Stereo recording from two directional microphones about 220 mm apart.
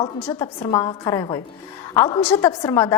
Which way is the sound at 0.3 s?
20° left (ahead or behind).